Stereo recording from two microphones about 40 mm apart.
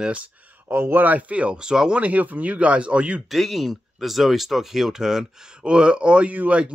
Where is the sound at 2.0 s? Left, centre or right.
Right.